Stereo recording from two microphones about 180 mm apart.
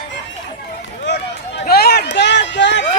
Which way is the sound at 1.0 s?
70° left (ahead or behind).